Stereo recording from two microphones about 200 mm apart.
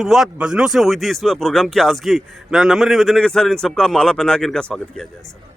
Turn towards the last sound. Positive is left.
turn(degrees=5)  # may be behind; listen again after turning